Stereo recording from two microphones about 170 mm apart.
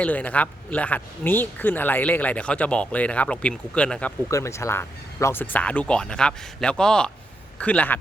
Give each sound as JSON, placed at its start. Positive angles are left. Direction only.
{"t": 0.0, "sound": "speech", "side_deg": 10}
{"t": 4.3, "sound": "speech", "side_deg": 15}